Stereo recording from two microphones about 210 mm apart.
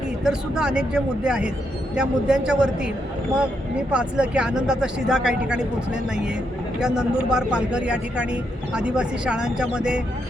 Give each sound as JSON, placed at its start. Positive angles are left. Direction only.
{"t": 0.3, "sound": "speech", "side_deg": -5}
{"t": 3.9, "sound": "speech", "side_deg": -5}